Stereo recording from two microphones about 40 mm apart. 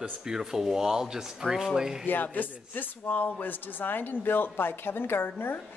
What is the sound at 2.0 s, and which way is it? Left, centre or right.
Speech, left.